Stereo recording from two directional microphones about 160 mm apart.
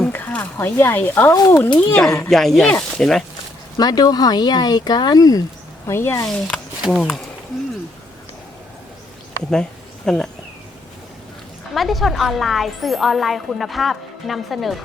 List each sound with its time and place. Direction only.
0.0 s speech: 10° left (ahead or behind)
2.3 s speech: centre (ahead or behind)
3.8 s speech: 25° left (ahead or behind)
6.2 s speech: 5° left (ahead or behind)
10.1 s speech: 5° left (ahead or behind)
11.7 s speech: centre (ahead or behind)